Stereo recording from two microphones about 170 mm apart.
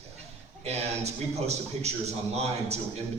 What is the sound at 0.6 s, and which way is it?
A man's voice, 40° right (ahead or behind).